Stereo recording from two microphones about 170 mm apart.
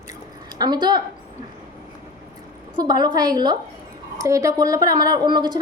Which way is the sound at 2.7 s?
25° right (ahead or behind).